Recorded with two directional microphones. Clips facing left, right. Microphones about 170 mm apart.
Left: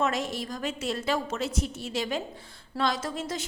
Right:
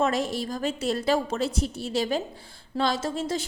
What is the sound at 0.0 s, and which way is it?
A woman's voice, 35° right (ahead or behind).